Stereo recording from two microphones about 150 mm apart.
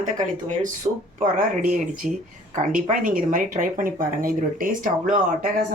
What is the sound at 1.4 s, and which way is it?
Speech, 65° right (ahead or behind).